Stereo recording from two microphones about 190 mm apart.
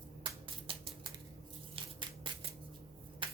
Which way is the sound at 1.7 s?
25° right (ahead or behind).